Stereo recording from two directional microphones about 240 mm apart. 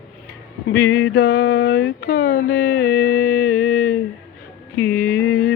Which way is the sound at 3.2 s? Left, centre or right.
Left.